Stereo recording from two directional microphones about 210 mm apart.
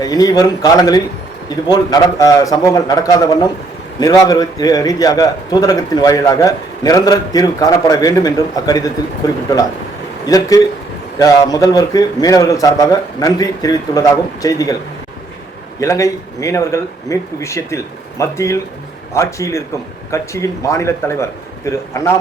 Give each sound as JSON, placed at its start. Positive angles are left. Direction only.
{"t": 0.0, "sound": "a man's voice", "side_deg": 15}
{"t": 10.2, "sound": "a man's voice", "side_deg": 15}
{"t": 15.8, "sound": "a man's voice", "side_deg": 15}